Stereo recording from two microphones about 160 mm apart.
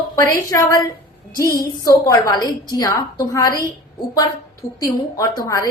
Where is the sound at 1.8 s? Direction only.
20° left (ahead or behind).